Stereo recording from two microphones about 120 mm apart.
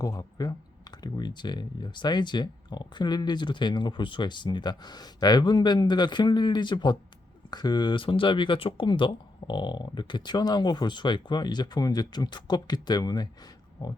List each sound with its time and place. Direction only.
0.0 s speech: 30° left (ahead or behind)